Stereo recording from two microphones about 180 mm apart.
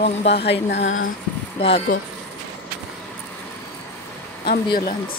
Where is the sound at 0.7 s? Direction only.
90° left.